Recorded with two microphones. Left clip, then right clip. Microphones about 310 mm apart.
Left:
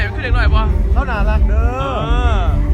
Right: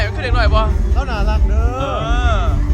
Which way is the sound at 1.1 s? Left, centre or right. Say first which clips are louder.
Left 1 dB; left.